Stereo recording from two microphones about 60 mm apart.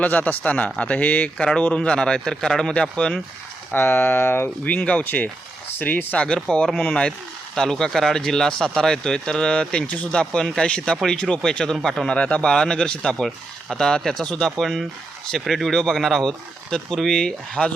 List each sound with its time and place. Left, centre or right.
0.0 s speech: left
3.7 s speech: left
4.6 s speech: left
6.2 s speech: centre
12.0 s speech: centre